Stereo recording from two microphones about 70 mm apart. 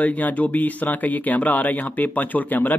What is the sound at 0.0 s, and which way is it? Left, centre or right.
Speech, left.